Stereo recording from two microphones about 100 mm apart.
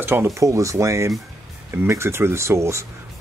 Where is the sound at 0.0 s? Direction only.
25° right (ahead or behind).